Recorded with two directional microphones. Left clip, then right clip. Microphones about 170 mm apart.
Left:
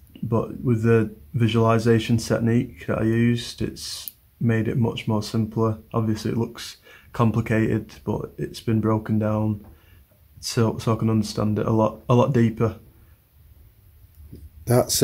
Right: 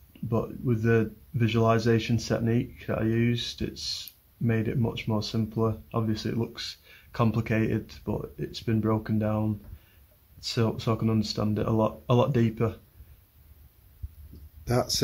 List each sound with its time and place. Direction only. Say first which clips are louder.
0.3 s speech: left 5 dB; 5° left (ahead or behind)
14.6 s speech: left 7 dB; 30° left (ahead or behind)